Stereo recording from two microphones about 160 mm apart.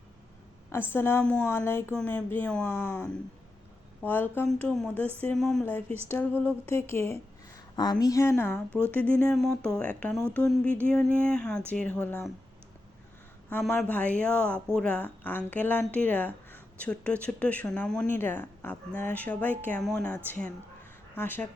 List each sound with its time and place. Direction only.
0.7 s speech: 15° left (ahead or behind)
6.1 s speech: 15° left (ahead or behind)
13.5 s speech: 10° left (ahead or behind)
21.2 s speech: 10° left (ahead or behind)